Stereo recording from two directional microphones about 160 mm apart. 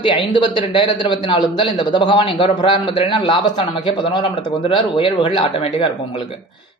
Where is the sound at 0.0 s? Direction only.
30° left (ahead or behind).